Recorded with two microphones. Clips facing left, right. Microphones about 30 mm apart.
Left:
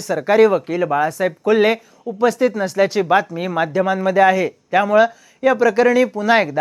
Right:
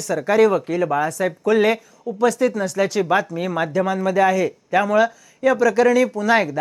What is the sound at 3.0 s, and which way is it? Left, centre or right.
Speech, centre.